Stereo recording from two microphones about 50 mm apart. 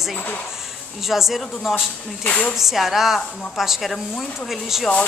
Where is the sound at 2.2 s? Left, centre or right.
Left.